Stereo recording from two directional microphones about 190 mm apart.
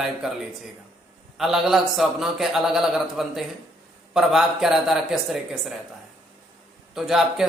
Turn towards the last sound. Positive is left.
turn(degrees=0)  # may be behind; listen again after turning